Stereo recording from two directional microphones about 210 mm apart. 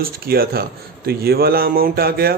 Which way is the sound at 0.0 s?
45° right (ahead or behind).